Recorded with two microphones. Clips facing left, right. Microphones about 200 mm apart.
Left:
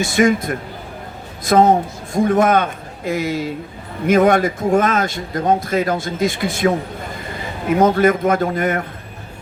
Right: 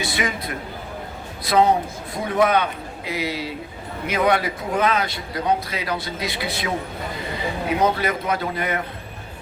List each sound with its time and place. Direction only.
0.0 s a man's voice: 45° left (ahead or behind)